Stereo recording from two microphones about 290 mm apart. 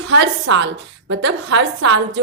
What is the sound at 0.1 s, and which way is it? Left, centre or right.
A woman's voice, right.